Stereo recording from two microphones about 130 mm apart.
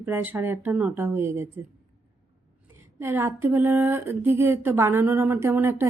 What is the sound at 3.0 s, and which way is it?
Speech, 20° right (ahead or behind).